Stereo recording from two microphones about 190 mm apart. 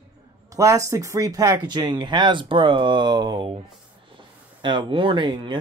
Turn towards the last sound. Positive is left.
turn(degrees=-25)  # may be behind; listen again after turning